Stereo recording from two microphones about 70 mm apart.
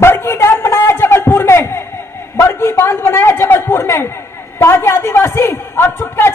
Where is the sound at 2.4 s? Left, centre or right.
Left.